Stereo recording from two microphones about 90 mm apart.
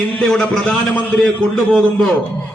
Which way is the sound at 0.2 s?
10° left (ahead or behind).